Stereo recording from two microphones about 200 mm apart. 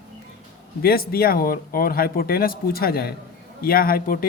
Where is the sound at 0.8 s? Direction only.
50° left (ahead or behind).